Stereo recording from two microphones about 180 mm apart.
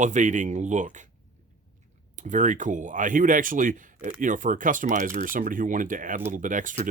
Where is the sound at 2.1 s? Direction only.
45° right (ahead or behind).